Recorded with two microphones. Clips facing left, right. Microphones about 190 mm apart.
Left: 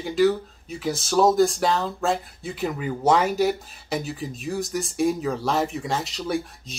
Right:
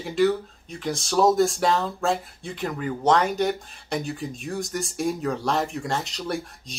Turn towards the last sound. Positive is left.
turn(degrees=0)  # may be behind; listen again after turning